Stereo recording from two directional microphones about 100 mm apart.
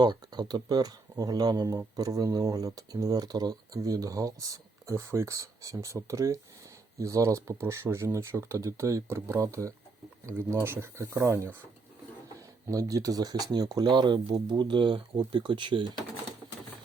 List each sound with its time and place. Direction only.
0.0 s speech: 45° right (ahead or behind); by 11.5 s 30° right (ahead or behind)
12.7 s speech: 35° right (ahead or behind); by 15.9 s 55° right (ahead or behind)